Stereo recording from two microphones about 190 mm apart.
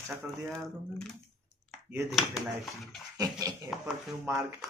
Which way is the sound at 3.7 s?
Centre (ahead or behind).